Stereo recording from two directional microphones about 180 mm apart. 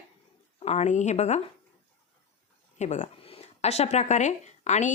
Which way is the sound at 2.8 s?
40° left (ahead or behind).